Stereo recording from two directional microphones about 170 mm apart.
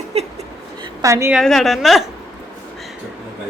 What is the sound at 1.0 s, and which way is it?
Speech, 15° right (ahead or behind).